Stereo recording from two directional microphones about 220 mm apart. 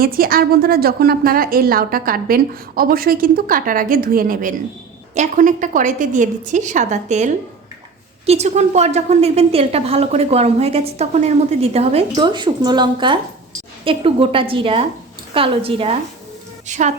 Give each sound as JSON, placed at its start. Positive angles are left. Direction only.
{"t": 0.0, "sound": "a woman's voice", "side_deg": -40}